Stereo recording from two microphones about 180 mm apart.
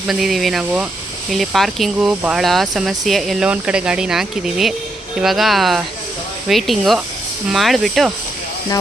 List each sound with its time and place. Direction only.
0.1 s speech: centre (ahead or behind)